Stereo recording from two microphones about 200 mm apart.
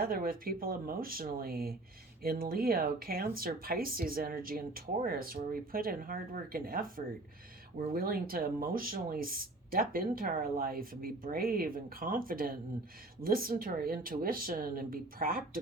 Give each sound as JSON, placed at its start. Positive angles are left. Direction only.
{"t": 0.0, "sound": "speech", "side_deg": -45}